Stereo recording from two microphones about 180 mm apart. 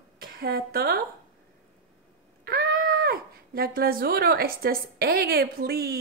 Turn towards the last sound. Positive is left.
turn(degrees=-60)  # may be behind; listen again after turning